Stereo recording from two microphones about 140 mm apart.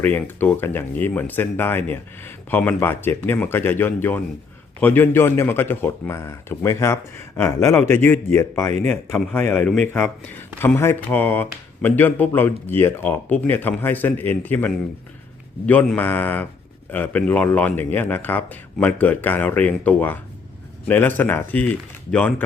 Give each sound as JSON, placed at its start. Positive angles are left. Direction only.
{"t": 0.0, "sound": "speech", "side_deg": 10}